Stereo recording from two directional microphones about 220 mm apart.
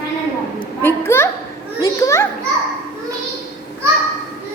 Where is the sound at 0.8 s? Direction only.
10° left (ahead or behind).